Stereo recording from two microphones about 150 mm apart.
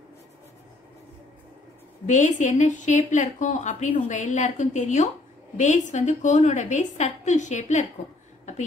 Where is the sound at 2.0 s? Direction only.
55° left (ahead or behind).